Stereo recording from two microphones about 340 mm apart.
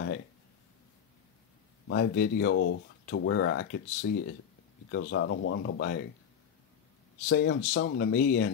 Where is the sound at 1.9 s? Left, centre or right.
Left.